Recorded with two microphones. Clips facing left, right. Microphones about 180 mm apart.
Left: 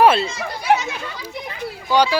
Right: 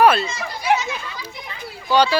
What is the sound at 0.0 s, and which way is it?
Speech, 25° left (ahead or behind).